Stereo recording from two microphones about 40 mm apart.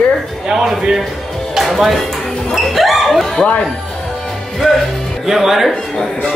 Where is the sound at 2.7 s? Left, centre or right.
Centre.